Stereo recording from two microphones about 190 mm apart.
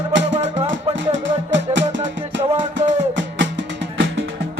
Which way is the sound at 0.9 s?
75° right (ahead or behind).